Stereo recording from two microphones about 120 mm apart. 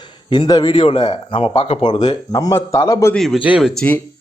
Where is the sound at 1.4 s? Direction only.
50° left (ahead or behind).